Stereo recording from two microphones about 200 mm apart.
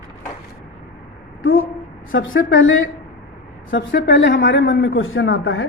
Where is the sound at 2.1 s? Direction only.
70° left (ahead or behind).